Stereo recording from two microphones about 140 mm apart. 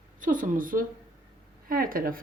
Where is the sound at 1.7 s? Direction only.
90° right.